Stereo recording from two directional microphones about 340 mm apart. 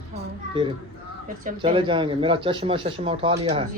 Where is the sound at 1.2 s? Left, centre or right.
Right.